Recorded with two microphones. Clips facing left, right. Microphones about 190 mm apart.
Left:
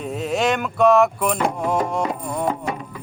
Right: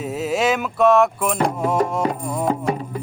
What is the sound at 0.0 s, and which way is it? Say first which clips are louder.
Speech: right 1 dB; 5° right (ahead or behind).